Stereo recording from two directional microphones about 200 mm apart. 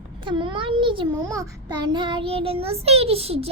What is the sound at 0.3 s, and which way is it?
A child's voice, 25° right (ahead or behind).